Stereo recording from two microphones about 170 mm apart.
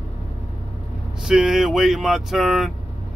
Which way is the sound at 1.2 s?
5° right (ahead or behind).